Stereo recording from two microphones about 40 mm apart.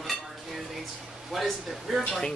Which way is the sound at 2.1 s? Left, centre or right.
Centre.